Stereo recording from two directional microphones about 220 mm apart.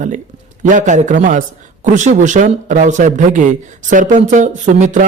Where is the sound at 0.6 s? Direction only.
35° right (ahead or behind).